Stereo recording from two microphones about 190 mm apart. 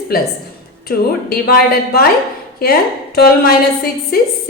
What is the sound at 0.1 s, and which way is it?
A woman's voice, 50° left (ahead or behind).